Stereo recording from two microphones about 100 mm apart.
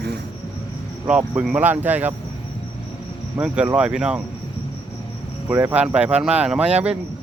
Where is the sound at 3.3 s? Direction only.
15° right (ahead or behind).